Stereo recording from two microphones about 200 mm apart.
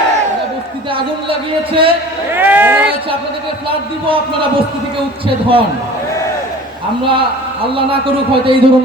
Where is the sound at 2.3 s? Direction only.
10° right (ahead or behind).